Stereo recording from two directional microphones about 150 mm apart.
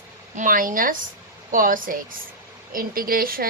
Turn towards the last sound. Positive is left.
turn(degrees=-75)  # may be behind; listen again after turning